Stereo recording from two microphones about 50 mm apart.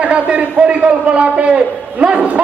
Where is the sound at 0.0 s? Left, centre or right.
Right.